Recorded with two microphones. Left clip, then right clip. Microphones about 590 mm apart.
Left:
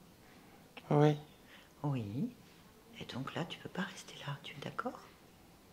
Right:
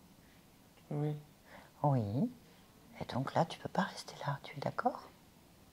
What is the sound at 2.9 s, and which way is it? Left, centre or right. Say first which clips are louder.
Speech: right 8 dB; centre.